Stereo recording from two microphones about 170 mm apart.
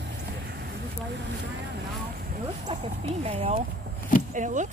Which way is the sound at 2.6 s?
40° right (ahead or behind).